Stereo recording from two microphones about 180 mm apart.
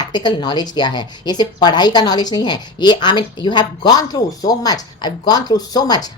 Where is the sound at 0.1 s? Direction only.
25° left (ahead or behind).